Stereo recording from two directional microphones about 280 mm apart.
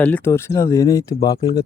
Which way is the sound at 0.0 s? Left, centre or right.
Centre.